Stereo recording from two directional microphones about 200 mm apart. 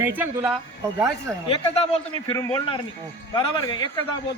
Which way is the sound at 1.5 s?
30° left (ahead or behind).